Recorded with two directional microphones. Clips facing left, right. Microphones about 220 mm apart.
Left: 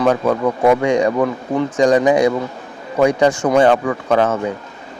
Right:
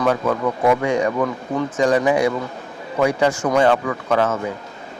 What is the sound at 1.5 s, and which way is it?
Speech, 30° left (ahead or behind).